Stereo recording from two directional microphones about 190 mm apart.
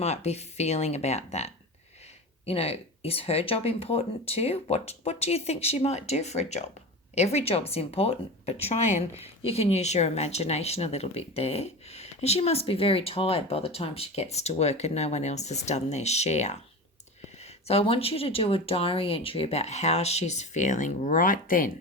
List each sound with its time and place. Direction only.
0.0 s speech: 35° left (ahead or behind)
2.5 s speech: 30° left (ahead or behind)
17.7 s speech: 30° left (ahead or behind)